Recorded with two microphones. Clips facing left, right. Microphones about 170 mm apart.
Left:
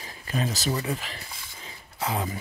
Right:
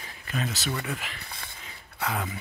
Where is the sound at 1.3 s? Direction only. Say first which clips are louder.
Right 2 dB; 60° right (ahead or behind).